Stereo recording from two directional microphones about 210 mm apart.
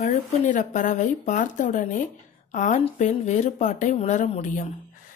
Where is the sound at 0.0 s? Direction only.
35° left (ahead or behind).